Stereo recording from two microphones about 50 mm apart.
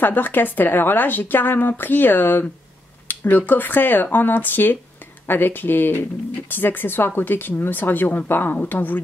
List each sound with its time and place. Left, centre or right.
0.0 s a woman's voice: left